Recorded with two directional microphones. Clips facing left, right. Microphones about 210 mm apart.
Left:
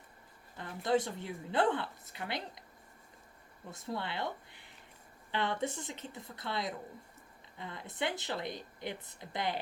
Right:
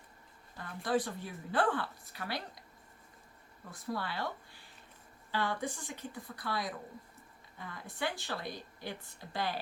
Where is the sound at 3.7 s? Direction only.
25° left (ahead or behind).